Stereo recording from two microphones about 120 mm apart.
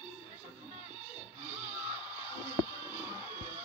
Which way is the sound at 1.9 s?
40° left (ahead or behind).